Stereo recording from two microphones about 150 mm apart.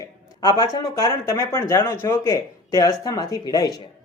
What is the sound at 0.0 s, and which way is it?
Speech, 30° left (ahead or behind).